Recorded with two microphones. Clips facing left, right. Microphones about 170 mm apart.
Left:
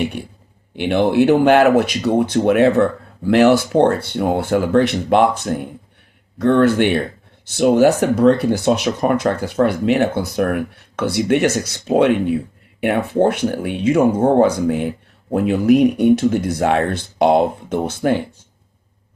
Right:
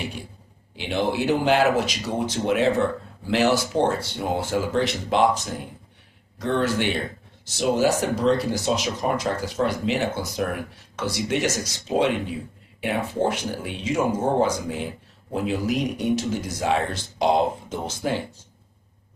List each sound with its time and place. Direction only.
0.8 s speech: 60° left (ahead or behind)